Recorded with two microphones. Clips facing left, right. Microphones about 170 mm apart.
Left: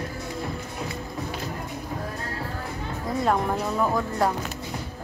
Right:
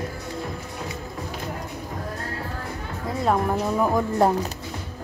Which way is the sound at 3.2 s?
5° right (ahead or behind).